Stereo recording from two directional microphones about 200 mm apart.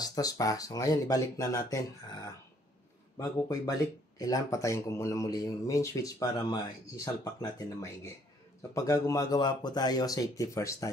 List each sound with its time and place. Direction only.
0.0 s speech: 20° left (ahead or behind)